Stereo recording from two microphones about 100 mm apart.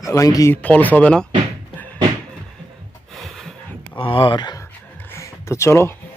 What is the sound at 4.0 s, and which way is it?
Speech, 60° left (ahead or behind).